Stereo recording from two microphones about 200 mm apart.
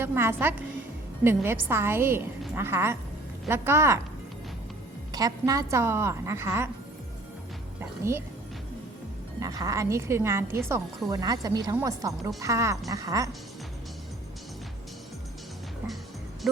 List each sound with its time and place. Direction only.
0.0 s a woman's voice: 10° right (ahead or behind)
5.1 s a woman's voice: 20° right (ahead or behind)
7.8 s speech: 10° right (ahead or behind)
9.4 s a woman's voice: 15° right (ahead or behind)